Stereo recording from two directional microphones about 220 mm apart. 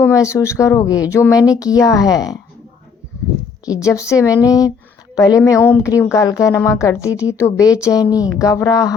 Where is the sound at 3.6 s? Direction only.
15° left (ahead or behind).